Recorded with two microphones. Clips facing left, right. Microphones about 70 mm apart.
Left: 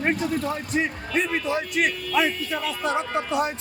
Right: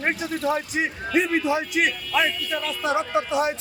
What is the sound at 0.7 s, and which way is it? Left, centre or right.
A man's voice, centre.